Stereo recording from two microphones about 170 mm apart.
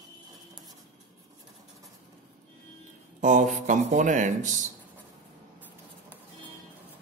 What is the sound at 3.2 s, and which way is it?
Speech, 50° right (ahead or behind).